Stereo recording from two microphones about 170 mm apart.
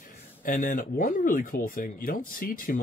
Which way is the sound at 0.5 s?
50° left (ahead or behind).